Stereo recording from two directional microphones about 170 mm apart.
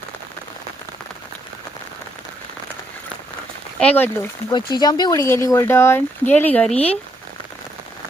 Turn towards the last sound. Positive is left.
turn(degrees=5)  # may be behind; listen again after turning